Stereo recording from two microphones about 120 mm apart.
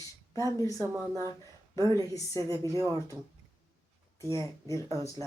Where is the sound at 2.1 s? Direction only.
25° left (ahead or behind).